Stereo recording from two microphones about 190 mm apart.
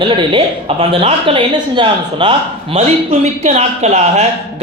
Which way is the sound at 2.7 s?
35° right (ahead or behind).